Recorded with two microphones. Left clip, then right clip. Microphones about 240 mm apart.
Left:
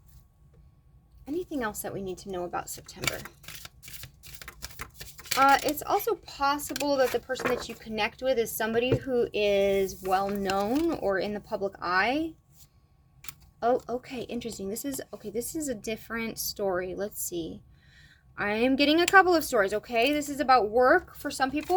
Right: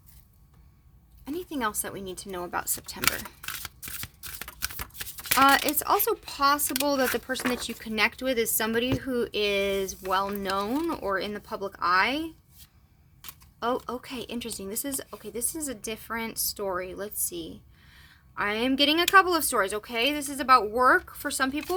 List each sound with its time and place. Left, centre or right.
1.2 s speech: centre; by 3.2 s right
5.4 s speech: right; by 12.3 s centre
13.6 s speech: centre